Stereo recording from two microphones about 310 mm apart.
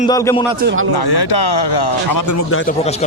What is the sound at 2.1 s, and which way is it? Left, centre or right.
Speech, left.